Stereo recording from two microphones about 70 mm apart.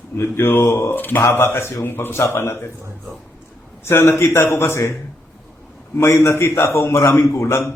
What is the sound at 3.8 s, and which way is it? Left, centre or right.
A man's voice, left.